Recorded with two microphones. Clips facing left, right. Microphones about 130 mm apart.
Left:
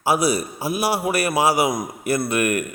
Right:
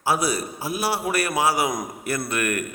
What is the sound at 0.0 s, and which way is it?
A man's voice, 15° left (ahead or behind).